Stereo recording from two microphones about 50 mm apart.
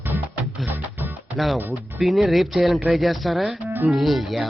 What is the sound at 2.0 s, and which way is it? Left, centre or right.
Speech, centre.